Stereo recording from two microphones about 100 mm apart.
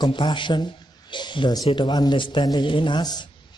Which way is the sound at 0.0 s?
50° left (ahead or behind).